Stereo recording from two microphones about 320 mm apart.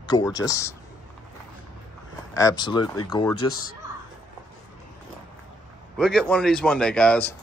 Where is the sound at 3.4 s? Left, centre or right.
Left.